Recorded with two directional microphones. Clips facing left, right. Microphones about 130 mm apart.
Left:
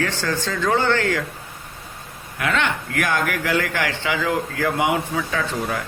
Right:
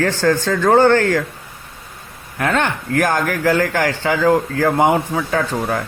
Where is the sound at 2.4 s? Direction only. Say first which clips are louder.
Right 4 dB; 40° right (ahead or behind).